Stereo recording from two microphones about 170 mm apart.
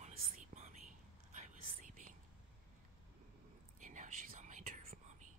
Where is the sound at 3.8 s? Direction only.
45° right (ahead or behind).